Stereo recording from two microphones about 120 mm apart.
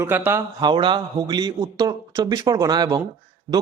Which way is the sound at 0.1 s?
15° right (ahead or behind).